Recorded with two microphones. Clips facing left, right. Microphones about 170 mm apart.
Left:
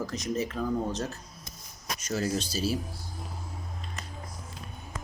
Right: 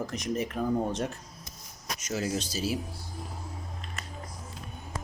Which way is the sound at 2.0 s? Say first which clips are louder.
Left 1 dB; 10° right (ahead or behind).